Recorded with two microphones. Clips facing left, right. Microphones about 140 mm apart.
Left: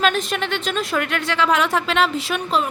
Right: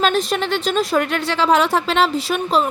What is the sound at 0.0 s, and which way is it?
A woman's voice, 35° right (ahead or behind).